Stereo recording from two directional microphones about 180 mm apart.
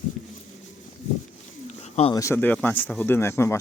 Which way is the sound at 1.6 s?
35° left (ahead or behind).